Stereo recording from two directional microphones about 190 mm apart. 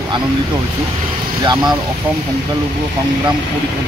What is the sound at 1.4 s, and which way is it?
Speech, 20° right (ahead or behind).